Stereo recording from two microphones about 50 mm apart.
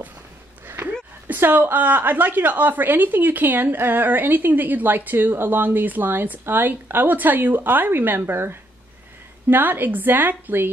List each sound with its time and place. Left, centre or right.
1.2 s a woman's voice: right
9.5 s a woman's voice: right